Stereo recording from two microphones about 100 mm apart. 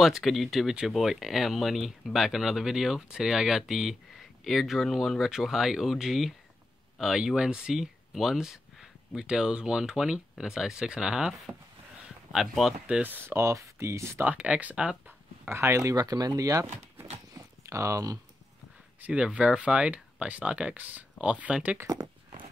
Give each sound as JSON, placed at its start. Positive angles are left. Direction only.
{"t": 0.0, "sound": "speech", "side_deg": 0}
{"t": 12.8, "sound": "speech", "side_deg": -15}
{"t": 14.3, "sound": "speech", "side_deg": -15}
{"t": 17.3, "sound": "a sound", "side_deg": -35}
{"t": 18.9, "sound": "speech", "side_deg": -15}
{"t": 21.8, "sound": "speech", "side_deg": -35}